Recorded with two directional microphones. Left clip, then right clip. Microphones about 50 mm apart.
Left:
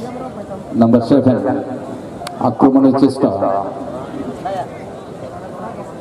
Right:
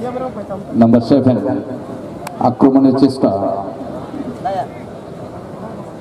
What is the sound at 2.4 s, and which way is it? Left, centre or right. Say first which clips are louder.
Speech: even; right.